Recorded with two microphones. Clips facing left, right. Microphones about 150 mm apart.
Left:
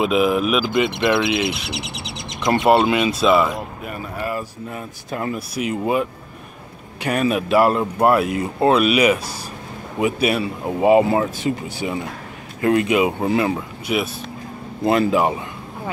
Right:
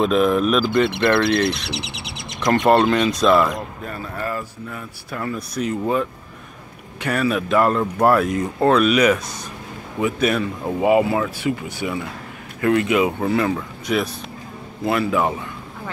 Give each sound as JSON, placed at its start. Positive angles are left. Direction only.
{"t": 0.0, "sound": "speech", "side_deg": 5}
{"t": 3.8, "sound": "speech", "side_deg": 15}
{"t": 5.5, "sound": "speech", "side_deg": 10}
{"t": 10.2, "sound": "speech", "side_deg": 10}
{"t": 10.8, "sound": "speech", "side_deg": 25}
{"t": 14.9, "sound": "speech", "side_deg": 25}